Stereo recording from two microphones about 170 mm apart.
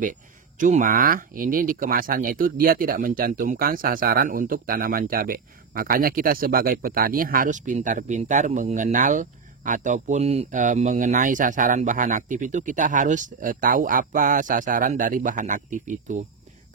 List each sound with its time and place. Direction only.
0.0 s speech: 50° right (ahead or behind)